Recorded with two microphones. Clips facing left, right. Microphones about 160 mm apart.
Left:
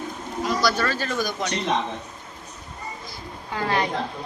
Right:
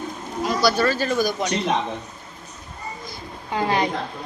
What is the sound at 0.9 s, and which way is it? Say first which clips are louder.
Speech: right 5 dB; 15° right (ahead or behind).